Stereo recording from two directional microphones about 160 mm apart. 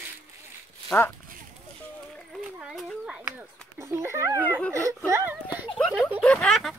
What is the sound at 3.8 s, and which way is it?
Speech, 15° right (ahead or behind).